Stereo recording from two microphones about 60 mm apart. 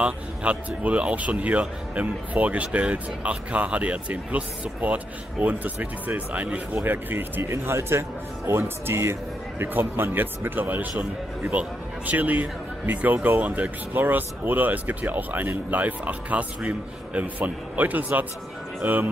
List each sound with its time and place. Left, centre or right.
0.0 s speech: right
6.8 s speech: right
7.4 s speech: right